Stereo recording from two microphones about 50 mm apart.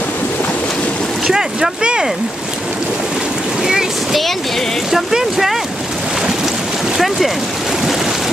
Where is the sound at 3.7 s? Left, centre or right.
Centre.